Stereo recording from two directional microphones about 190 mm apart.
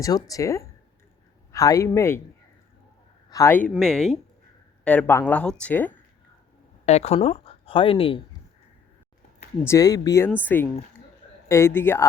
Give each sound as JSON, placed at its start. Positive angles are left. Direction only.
{"t": 0.0, "sound": "speech", "side_deg": 20}
{"t": 3.2, "sound": "speech", "side_deg": 15}
{"t": 3.7, "sound": "speech", "side_deg": 0}
{"t": 6.8, "sound": "speech", "side_deg": 35}
{"t": 9.6, "sound": "speech", "side_deg": 20}